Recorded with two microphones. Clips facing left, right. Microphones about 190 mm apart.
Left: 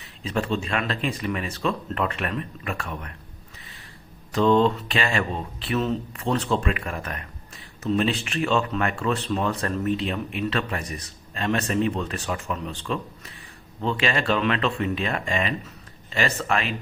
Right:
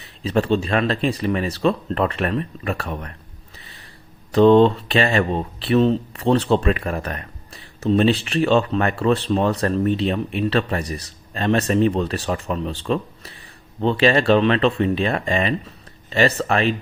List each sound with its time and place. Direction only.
0.0 s speech: 35° right (ahead or behind)
4.3 s speech: 35° right (ahead or behind)